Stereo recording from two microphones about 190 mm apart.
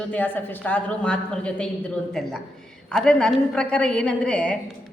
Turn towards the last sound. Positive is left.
turn(degrees=5)  # may be behind; listen again after turning